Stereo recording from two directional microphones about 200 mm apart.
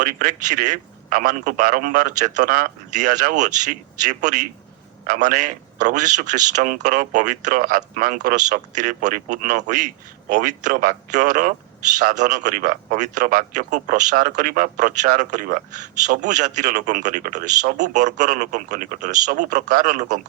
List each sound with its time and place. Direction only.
0.0 s speech: 40° right (ahead or behind)